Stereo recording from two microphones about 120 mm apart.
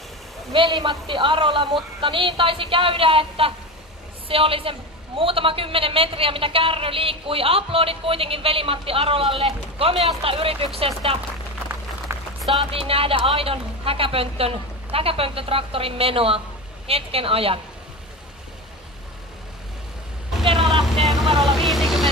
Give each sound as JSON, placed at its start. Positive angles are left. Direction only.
{"t": 0.5, "sound": "a woman's voice", "side_deg": -45}
{"t": 12.1, "sound": "a sound", "side_deg": -20}
{"t": 12.5, "sound": "a woman's voice", "side_deg": -50}
{"t": 20.4, "sound": "vehicle", "side_deg": -45}
{"t": 20.9, "sound": "vehicle", "side_deg": 0}